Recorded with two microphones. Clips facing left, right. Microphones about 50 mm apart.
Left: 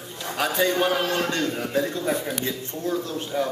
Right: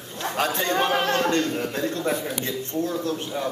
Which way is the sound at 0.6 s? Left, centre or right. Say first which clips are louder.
Even; right.